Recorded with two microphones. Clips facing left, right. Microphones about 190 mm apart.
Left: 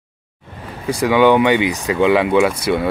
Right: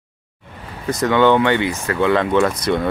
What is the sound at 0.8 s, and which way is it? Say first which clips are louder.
Speech: left 2 dB; 10° left (ahead or behind).